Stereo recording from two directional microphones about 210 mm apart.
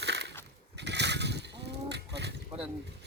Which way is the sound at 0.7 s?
55° right (ahead or behind).